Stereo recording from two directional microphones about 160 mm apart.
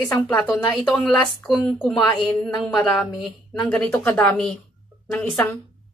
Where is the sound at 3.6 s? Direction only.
5° left (ahead or behind).